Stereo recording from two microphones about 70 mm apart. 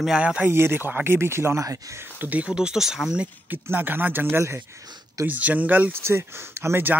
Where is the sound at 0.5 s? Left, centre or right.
Right.